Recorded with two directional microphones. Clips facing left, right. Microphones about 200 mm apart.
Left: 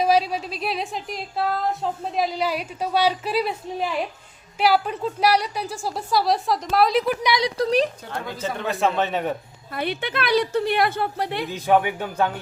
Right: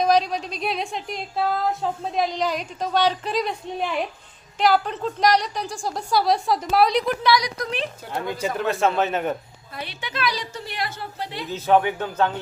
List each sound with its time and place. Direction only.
0.0 s speech: 5° left (ahead or behind)
7.4 s a woman's voice: 35° left (ahead or behind)
8.1 s speech: 10° right (ahead or behind)
8.6 s speech: centre (ahead or behind)
9.7 s a woman's voice: 55° left (ahead or behind)
11.4 s speech: 15° left (ahead or behind)